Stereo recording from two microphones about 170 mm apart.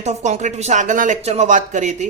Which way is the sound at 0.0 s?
45° right (ahead or behind).